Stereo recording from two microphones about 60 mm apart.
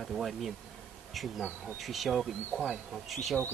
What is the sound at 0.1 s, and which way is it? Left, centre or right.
Speech, centre.